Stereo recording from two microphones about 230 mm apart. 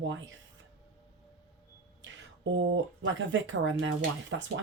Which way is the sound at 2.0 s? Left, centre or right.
Right.